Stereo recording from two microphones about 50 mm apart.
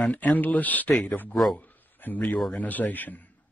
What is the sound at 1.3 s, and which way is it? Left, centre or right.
Speech, centre.